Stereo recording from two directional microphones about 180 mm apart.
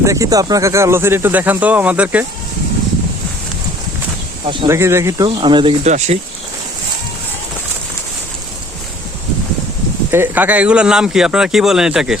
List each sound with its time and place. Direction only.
0.0 s speech: 15° right (ahead or behind)
4.7 s speech: 15° right (ahead or behind)
5.8 s speech: 40° right (ahead or behind)
10.1 s speech: 10° right (ahead or behind)